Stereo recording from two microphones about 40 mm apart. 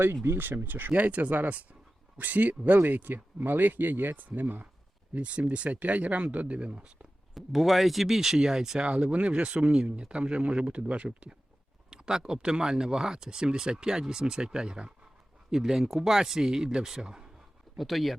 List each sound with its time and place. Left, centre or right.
0.3 s speech: right
0.9 s speech: right
5.1 s speech: right
7.3 s speech: centre
9.0 s speech: right
11.9 s speech: centre
17.7 s speech: centre